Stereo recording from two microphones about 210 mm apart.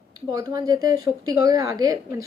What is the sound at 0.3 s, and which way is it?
A woman's voice, 20° right (ahead or behind).